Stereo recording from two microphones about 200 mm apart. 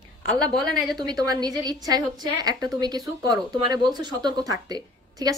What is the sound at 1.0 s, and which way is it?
A woman's voice, 20° right (ahead or behind).